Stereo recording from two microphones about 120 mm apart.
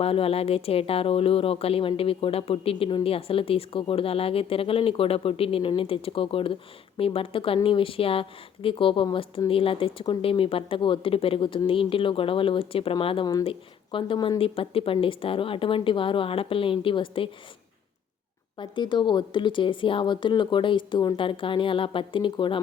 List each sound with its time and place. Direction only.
0.0 s speech: 55° left (ahead or behind)
18.5 s speech: 40° left (ahead or behind)